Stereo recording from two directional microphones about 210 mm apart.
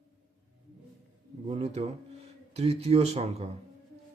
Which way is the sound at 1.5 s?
30° right (ahead or behind).